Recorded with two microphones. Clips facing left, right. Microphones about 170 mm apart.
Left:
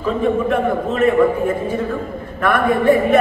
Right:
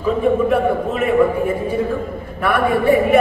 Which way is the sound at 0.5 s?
10° right (ahead or behind).